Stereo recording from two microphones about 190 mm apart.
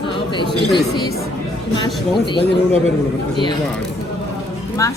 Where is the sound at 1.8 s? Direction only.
25° left (ahead or behind).